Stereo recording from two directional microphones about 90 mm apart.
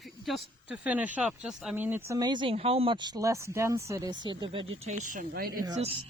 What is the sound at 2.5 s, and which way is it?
Speech, 90° right.